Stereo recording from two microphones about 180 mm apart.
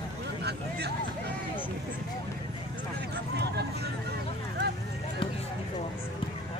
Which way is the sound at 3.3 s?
65° right (ahead or behind).